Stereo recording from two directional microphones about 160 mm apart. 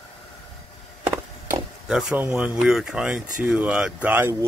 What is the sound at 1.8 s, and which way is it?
Speech, 5° right (ahead or behind).